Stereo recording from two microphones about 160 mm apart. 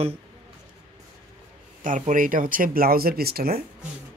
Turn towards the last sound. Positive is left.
turn(degrees=-70)  # may be behind; listen again after turning